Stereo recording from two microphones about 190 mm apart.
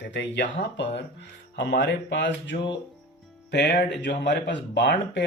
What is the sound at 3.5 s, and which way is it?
Speech, 55° left (ahead or behind).